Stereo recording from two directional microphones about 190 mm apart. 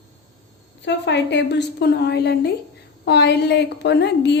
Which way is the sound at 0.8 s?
65° left (ahead or behind).